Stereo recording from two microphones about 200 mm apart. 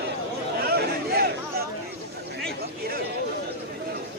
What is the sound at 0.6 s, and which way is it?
Chatter, 50° right (ahead or behind).